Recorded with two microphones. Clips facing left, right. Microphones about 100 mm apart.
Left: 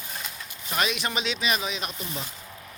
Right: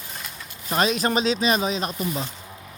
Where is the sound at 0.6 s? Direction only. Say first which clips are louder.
Right 6 dB; 35° right (ahead or behind).